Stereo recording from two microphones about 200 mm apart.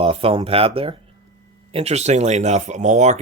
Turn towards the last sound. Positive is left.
turn(degrees=-35)  # may be behind; listen again after turning